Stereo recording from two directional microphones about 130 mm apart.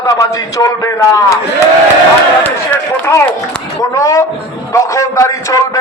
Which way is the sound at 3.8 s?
25° left (ahead or behind).